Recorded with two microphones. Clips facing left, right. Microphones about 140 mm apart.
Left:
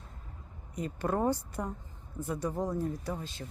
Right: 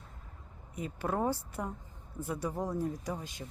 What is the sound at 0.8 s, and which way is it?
A woman's voice, 5° right (ahead or behind).